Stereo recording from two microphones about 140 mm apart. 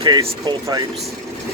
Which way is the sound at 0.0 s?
30° right (ahead or behind).